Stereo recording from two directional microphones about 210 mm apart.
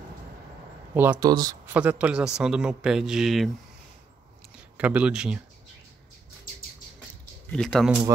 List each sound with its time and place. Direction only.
0.9 s speech: 10° right (ahead or behind)
1.7 s a man's voice: 5° right (ahead or behind)
4.7 s a man's voice: 5° right (ahead or behind)
7.5 s a man's voice: 5° left (ahead or behind)